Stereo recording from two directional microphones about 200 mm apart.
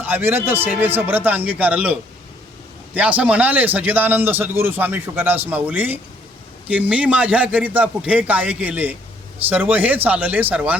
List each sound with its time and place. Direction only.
0.0 s a man's voice: 10° right (ahead or behind)